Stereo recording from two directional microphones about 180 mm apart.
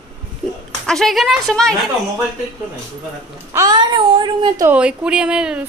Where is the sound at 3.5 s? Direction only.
25° right (ahead or behind).